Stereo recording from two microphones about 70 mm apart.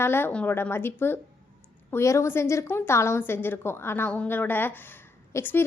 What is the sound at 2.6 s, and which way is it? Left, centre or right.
Speech, left.